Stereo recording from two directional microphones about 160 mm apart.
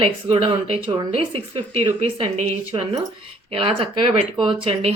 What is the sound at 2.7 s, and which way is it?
Speech, 30° right (ahead or behind).